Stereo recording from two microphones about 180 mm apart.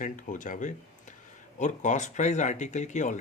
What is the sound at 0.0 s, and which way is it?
Speech, 45° left (ahead or behind).